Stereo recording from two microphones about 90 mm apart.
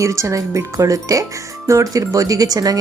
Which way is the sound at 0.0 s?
35° right (ahead or behind).